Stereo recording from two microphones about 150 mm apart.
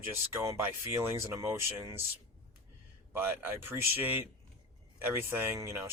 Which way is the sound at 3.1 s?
15° right (ahead or behind).